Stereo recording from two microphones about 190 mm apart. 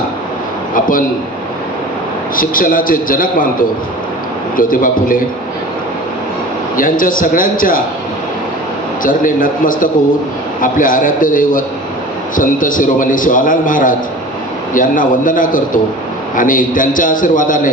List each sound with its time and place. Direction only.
0.7 s a sound: 45° left (ahead or behind)
2.3 s a man's voice: 45° left (ahead or behind)
6.7 s a man's voice: 45° left (ahead or behind)
9.0 s a man's voice: 45° left (ahead or behind)